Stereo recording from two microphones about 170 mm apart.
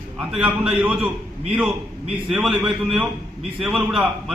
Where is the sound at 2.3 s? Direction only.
Centre (ahead or behind).